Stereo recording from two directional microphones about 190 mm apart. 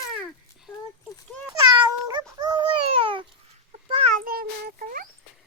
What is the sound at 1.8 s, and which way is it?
Meow, 25° right (ahead or behind).